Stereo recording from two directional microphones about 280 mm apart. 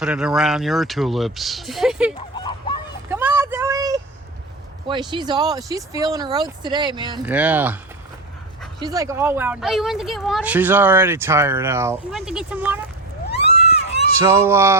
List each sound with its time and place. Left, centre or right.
0.0 s speech: centre
2.1 s goose: centre
3.1 s vehicle: centre
4.9 s speech: centre
8.8 s speech: centre
13.4 s a sound: left
14.2 s speech: centre